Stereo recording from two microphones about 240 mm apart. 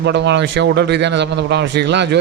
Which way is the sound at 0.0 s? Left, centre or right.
Right.